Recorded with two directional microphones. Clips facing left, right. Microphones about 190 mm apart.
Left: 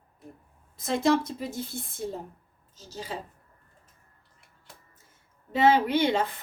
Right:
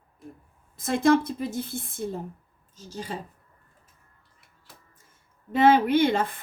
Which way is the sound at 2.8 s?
50° right (ahead or behind).